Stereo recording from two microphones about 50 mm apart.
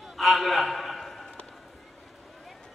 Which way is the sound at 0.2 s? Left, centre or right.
Centre.